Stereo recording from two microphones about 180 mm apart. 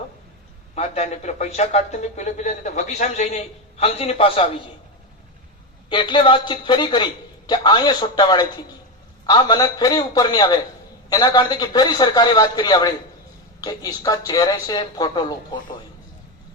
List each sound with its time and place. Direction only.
0.8 s a man's voice: 35° left (ahead or behind)
5.9 s a man's voice: 25° left (ahead or behind)